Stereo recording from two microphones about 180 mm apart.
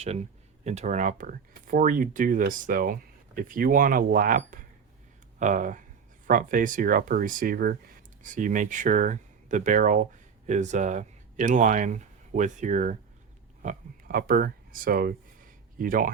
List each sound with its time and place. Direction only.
0.0 s speech: 35° right (ahead or behind); by 7.8 s 55° right (ahead or behind)
8.2 s speech: 45° right (ahead or behind)